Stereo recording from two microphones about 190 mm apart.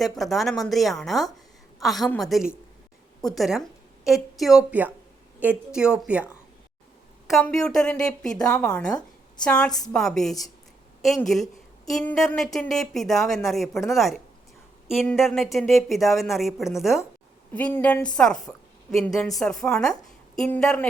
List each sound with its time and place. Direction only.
0.0 s a woman's voice: centre (ahead or behind)
7.3 s a woman's voice: centre (ahead or behind)